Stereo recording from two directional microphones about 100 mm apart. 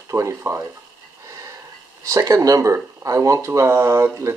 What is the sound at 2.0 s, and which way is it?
Speech, 30° right (ahead or behind).